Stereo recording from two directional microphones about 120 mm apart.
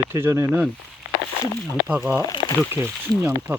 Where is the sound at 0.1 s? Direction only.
25° right (ahead or behind).